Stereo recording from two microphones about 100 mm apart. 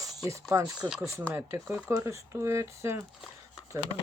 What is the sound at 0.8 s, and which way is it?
Speech, 10° right (ahead or behind).